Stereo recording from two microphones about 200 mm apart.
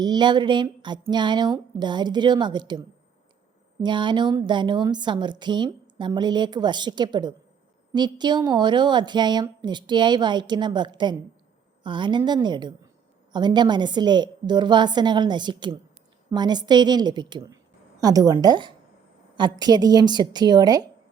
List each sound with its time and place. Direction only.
0.0 s a woman's voice: 20° right (ahead or behind)
3.8 s a woman's voice: 25° right (ahead or behind)